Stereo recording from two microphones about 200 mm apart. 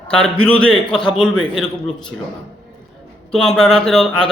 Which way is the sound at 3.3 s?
Centre (ahead or behind).